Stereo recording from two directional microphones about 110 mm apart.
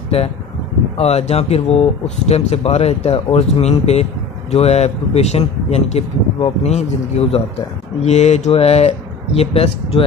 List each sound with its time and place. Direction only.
0.9 s speech: 70° left (ahead or behind)
8.0 s speech: 90° left; by 10.0 s 60° left (ahead or behind)